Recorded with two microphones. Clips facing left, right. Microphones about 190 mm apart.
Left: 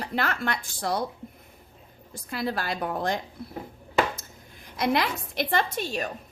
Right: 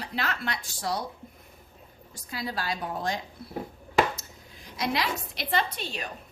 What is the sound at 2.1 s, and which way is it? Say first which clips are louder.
A woman's voice: left 5 dB; 55° left (ahead or behind).